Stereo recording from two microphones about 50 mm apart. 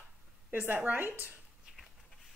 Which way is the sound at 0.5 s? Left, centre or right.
Right.